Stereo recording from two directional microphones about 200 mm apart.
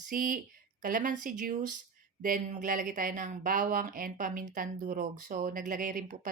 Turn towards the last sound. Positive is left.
turn(degrees=-40)  # may be behind; listen again after turning